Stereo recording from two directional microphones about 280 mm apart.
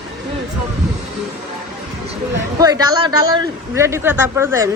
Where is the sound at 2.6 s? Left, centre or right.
Centre.